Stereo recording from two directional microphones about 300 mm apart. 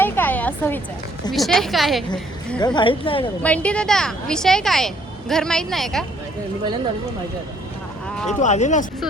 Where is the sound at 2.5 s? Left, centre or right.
Centre.